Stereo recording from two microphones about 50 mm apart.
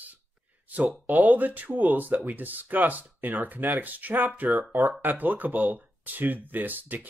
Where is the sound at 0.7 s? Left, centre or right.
Right.